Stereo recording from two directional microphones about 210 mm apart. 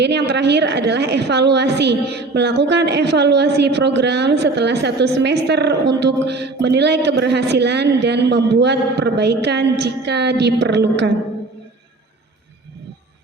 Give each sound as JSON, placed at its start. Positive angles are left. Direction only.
{"t": 0.0, "sound": "a woman's voice", "side_deg": -55}